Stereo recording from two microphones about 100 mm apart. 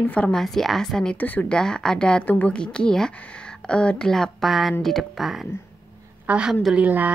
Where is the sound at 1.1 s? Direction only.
15° left (ahead or behind).